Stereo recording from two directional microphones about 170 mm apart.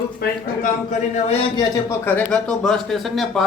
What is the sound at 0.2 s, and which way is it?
Speech, 60° left (ahead or behind).